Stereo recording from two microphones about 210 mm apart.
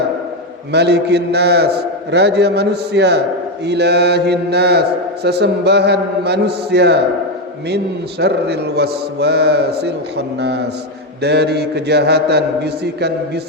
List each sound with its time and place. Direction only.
0.7 s mantra: 55° right (ahead or behind)
8.2 s mantra: 50° right (ahead or behind)